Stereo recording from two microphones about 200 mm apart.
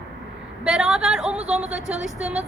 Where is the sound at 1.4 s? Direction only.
30° right (ahead or behind).